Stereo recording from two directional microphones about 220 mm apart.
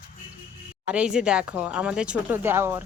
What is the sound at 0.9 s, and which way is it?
Speech, 5° right (ahead or behind).